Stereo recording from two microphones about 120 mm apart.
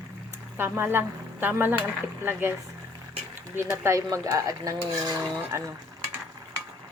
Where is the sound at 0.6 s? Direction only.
20° right (ahead or behind).